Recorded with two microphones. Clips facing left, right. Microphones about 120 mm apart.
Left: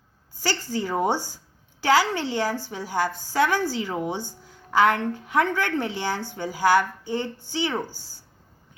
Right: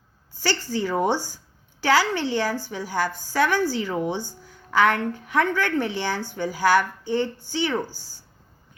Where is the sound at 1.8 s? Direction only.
25° left (ahead or behind).